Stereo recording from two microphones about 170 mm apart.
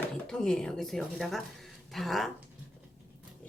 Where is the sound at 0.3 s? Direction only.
5° left (ahead or behind).